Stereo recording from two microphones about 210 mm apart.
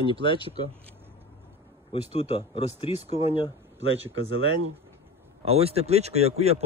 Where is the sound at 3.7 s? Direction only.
65° right (ahead or behind).